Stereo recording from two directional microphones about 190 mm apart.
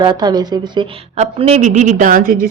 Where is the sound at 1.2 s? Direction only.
35° right (ahead or behind).